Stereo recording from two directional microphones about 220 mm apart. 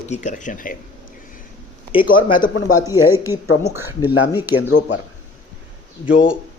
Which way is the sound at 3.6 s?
10° right (ahead or behind).